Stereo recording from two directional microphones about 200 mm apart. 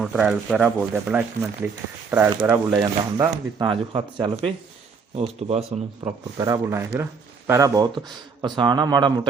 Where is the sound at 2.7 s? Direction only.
20° right (ahead or behind).